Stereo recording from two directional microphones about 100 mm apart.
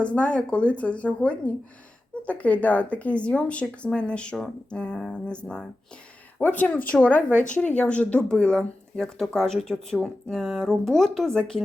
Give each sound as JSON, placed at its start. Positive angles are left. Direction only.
{"t": 0.0, "sound": "speech", "side_deg": 10}